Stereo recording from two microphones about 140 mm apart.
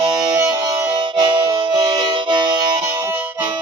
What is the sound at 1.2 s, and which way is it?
Music, 35° right (ahead or behind).